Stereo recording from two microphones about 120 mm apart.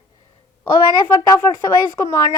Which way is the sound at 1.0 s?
30° left (ahead or behind).